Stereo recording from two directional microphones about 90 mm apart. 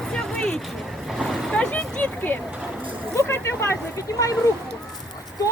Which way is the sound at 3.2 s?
30° left (ahead or behind).